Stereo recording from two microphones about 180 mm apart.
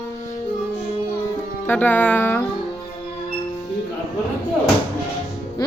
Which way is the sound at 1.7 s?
10° left (ahead or behind).